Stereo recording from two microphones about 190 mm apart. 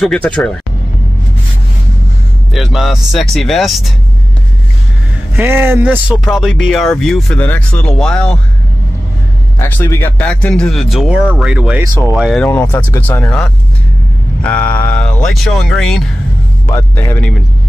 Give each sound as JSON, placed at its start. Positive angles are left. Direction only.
{"t": 0.0, "sound": "speech", "side_deg": 5}
{"t": 2.5, "sound": "speech", "side_deg": 0}
{"t": 5.3, "sound": "speech", "side_deg": -10}
{"t": 9.6, "sound": "speech", "side_deg": 10}
{"t": 11.8, "sound": "speech", "side_deg": -20}
{"t": 12.1, "sound": "speech", "side_deg": 0}
{"t": 12.4, "sound": "speech", "side_deg": 10}